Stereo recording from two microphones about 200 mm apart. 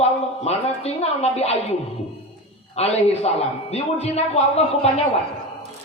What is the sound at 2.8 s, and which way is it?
A man's voice, 30° left (ahead or behind).